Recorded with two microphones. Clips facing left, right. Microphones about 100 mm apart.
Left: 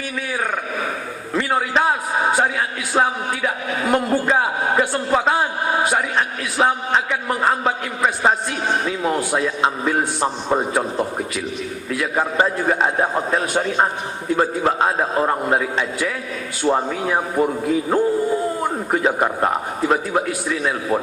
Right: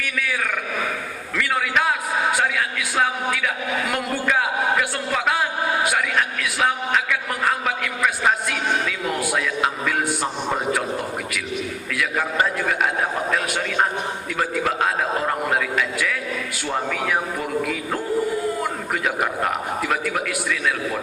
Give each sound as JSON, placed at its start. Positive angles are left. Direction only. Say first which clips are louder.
{"t": 0.0, "sound": "a man's voice", "louder": "left 1 dB", "side_deg": 30}
{"t": 11.9, "sound": "a man's voice", "louder": "left 4 dB", "side_deg": 30}